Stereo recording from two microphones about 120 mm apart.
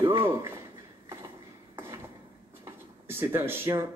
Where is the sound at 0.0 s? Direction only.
20° right (ahead or behind).